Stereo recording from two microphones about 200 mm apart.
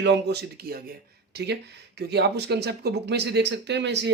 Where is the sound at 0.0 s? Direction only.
60° right (ahead or behind).